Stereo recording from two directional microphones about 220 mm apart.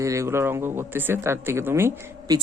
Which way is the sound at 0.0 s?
15° right (ahead or behind).